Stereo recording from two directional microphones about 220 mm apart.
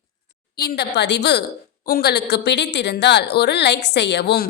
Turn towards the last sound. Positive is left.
turn(degrees=50)  # may be behind; listen again after turning